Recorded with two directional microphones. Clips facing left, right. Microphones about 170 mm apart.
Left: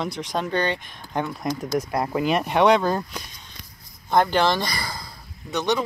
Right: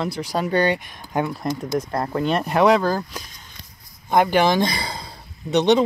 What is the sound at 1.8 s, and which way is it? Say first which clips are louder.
Speech: left 1 dB; 10° left (ahead or behind).